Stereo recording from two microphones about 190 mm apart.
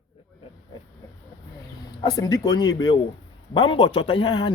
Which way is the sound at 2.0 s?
25° left (ahead or behind).